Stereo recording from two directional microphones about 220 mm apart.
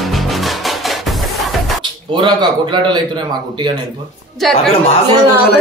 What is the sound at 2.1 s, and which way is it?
Speech, 20° right (ahead or behind).